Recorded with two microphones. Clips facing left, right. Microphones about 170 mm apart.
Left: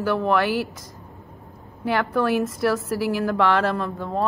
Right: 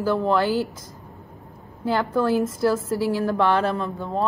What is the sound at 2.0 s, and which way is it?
Speech, 25° right (ahead or behind).